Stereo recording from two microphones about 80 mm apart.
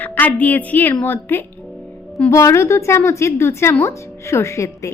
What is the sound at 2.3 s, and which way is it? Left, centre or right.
Speech, left.